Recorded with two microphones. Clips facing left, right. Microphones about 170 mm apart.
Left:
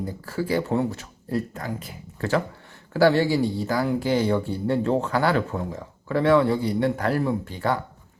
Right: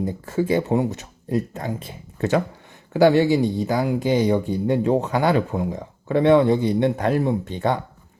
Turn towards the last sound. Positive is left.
turn(degrees=-20)  # may be behind; listen again after turning